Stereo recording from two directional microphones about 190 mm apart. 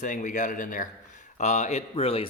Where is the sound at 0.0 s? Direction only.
40° left (ahead or behind).